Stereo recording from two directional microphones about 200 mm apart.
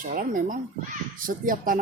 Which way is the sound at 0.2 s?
45° right (ahead or behind).